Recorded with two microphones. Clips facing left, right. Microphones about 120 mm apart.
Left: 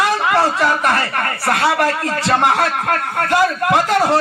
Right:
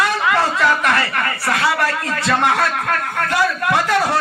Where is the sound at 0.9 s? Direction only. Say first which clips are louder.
Left 1 dB; 45° left (ahead or behind).